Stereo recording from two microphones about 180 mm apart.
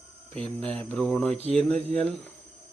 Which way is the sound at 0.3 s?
5° left (ahead or behind).